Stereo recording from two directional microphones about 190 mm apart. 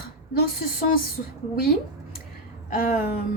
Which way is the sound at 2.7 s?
45° left (ahead or behind).